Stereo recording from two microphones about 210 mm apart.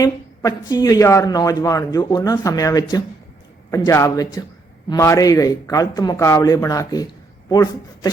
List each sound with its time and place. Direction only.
0.0 s speech: 15° left (ahead or behind)